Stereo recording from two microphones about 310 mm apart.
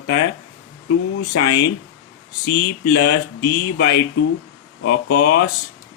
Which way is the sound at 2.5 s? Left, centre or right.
Left.